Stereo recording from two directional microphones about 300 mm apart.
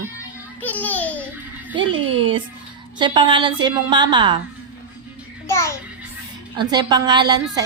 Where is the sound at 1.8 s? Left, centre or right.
Centre.